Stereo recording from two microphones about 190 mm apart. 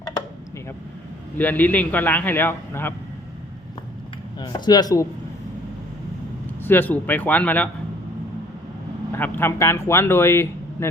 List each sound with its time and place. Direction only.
1.4 s speech: 10° left (ahead or behind)
4.4 s speech: 20° left (ahead or behind)
6.7 s speech: 10° left (ahead or behind)
9.1 s speech: 10° left (ahead or behind)